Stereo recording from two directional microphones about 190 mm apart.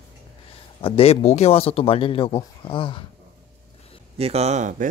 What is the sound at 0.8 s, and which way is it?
Speech, 30° left (ahead or behind).